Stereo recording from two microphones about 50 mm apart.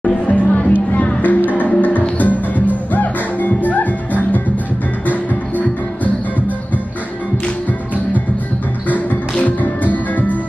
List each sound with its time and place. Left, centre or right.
0.3 s music: left
9.4 s music: left